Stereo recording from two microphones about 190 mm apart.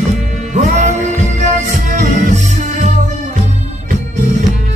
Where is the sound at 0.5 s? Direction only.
40° right (ahead or behind).